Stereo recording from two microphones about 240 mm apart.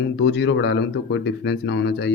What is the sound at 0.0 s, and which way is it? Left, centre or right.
Speech, left.